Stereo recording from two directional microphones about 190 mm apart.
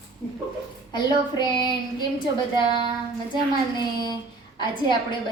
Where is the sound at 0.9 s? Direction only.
25° left (ahead or behind).